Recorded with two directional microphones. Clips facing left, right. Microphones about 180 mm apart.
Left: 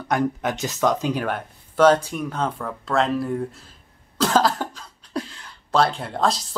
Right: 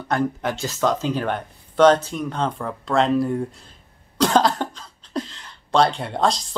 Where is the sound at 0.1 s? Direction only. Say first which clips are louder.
Even; 15° left (ahead or behind).